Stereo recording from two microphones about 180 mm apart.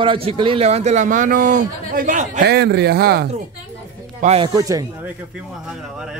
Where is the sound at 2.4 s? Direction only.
70° right (ahead or behind).